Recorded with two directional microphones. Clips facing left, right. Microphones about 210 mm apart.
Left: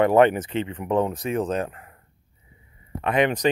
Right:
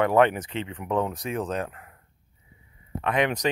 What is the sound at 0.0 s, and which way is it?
Speech, 35° left (ahead or behind).